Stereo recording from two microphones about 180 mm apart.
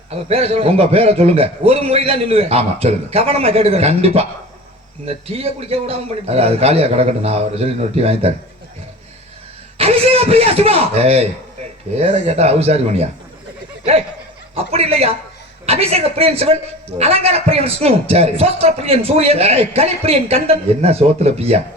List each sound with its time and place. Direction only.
0.1 s a man's voice: 35° right (ahead or behind)
9.7 s a man's voice: 35° right (ahead or behind)
14.5 s a man's voice: 35° right (ahead or behind)